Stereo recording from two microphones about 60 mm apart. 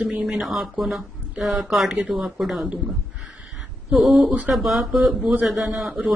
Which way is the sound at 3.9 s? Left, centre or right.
Centre.